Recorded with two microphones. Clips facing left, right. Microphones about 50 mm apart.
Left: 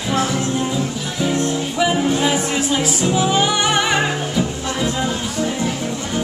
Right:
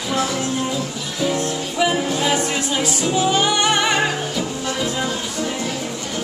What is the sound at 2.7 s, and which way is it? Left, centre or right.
Music, centre.